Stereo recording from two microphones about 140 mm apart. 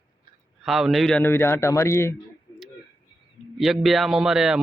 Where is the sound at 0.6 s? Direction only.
Centre (ahead or behind).